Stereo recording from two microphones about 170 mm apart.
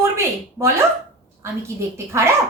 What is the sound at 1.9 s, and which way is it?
Speech, 15° right (ahead or behind).